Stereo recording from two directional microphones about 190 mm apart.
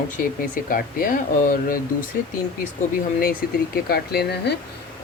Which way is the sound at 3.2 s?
50° left (ahead or behind).